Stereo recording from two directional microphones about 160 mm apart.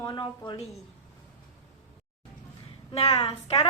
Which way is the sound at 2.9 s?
40° left (ahead or behind).